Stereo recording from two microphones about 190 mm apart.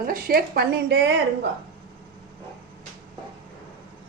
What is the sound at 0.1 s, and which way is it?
A woman's voice, 50° right (ahead or behind).